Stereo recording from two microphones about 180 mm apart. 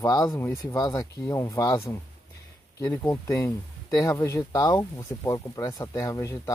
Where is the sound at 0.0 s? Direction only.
20° left (ahead or behind).